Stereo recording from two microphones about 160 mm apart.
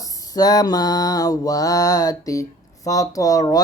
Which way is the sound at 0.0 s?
25° left (ahead or behind).